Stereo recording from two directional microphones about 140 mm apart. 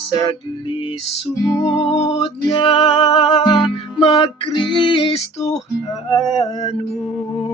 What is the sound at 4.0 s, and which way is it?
Music, 45° left (ahead or behind).